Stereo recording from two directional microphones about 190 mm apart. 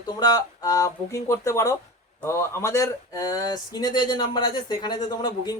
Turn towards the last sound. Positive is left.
turn(degrees=20)  # may be behind; listen again after turning